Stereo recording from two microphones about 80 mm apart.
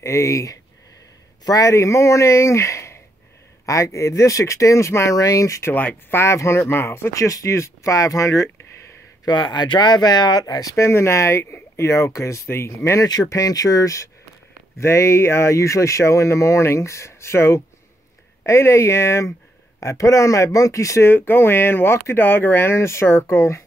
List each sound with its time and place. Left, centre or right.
0.0 s speech: left
9.2 s speech: left
10.8 s speech: left
13.0 s speech: left
21.1 s speech: left